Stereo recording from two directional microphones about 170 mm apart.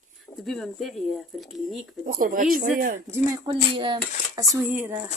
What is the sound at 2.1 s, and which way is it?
Speech, 55° right (ahead or behind).